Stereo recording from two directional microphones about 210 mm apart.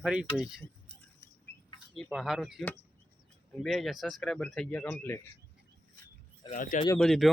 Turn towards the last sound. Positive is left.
turn(degrees=0)  # may be behind; listen again after turning